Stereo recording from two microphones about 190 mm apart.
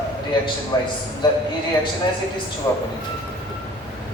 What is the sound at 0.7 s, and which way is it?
Speech, 20° left (ahead or behind).